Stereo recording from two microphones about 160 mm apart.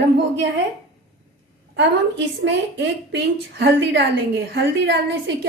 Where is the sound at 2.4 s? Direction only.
90° right.